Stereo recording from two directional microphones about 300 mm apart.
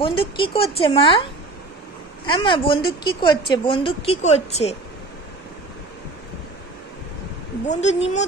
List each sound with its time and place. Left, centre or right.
0.0 s a woman's voice: centre
2.2 s a woman's voice: centre
7.6 s a woman's voice: left